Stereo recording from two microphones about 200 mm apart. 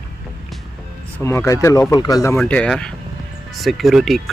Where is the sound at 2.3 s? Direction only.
5° left (ahead or behind).